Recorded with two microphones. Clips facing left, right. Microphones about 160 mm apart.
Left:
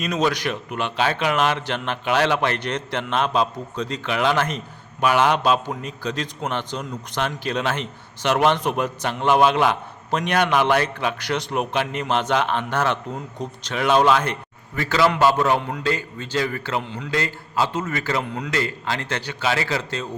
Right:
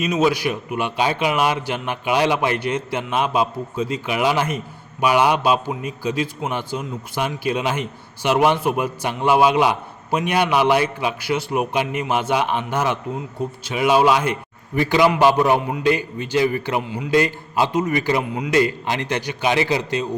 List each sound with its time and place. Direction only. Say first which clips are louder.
0.0 s a man's voice: right 3 dB; 5° right (ahead or behind)